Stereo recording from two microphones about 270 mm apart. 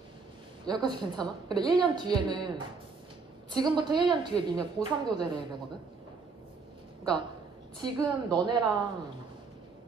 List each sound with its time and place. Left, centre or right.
0.7 s a woman's voice: centre
7.8 s a woman's voice: centre